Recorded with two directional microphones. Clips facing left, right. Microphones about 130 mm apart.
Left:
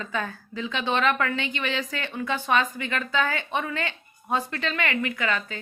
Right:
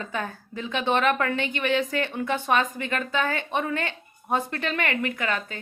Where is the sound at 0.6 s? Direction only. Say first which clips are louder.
Right 1 dB; 50° right (ahead or behind).